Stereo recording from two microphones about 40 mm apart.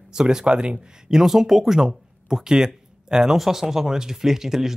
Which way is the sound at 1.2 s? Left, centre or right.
Centre.